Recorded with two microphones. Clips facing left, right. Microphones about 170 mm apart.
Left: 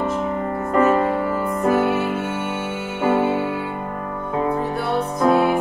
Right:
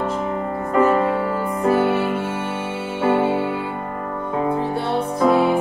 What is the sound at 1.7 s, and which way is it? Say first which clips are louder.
Music: right 1 dB; 30° right (ahead or behind).